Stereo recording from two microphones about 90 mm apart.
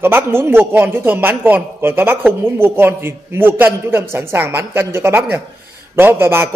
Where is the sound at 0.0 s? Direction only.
25° right (ahead or behind).